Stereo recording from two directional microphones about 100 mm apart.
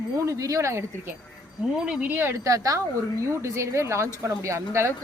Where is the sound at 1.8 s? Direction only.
15° right (ahead or behind).